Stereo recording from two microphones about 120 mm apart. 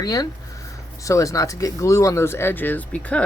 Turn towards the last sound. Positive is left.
turn(degrees=10)  # may be behind; listen again after turning